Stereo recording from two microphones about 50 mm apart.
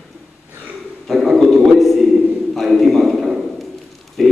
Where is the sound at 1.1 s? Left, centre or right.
Centre.